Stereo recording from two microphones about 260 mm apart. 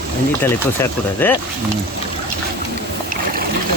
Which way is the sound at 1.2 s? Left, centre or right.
Centre.